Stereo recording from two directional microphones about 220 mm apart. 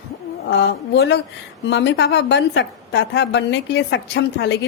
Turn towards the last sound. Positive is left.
turn(degrees=50)  # may be behind; listen again after turning